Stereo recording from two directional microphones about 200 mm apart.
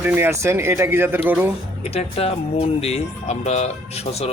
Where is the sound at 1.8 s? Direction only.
30° left (ahead or behind).